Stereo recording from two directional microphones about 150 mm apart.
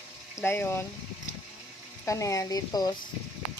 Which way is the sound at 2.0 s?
20° left (ahead or behind).